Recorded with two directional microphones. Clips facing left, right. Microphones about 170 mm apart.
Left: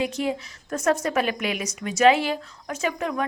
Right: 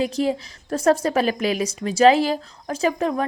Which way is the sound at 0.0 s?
35° right (ahead or behind).